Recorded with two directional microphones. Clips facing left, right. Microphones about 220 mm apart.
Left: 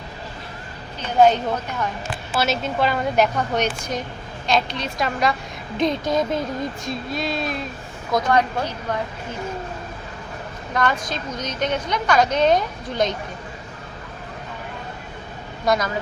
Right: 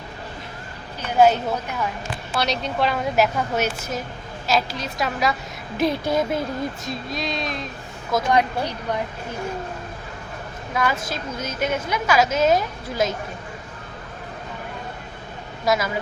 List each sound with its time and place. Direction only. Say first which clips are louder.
1.0 s a woman's voice: left 1 dB; 5° right (ahead or behind)
2.3 s a woman's voice: left 2 dB; 5° left (ahead or behind)
8.3 s a woman's voice: right 1 dB; 15° right (ahead or behind)
10.8 s a woman's voice: left 1 dB; 5° right (ahead or behind)
15.6 s a woman's voice: left 1 dB; 5° right (ahead or behind)